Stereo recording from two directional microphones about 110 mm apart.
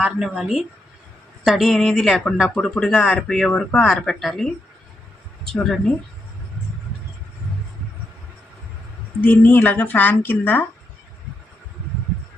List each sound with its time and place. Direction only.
0.0 s speech: 5° right (ahead or behind)
9.2 s speech: 15° left (ahead or behind)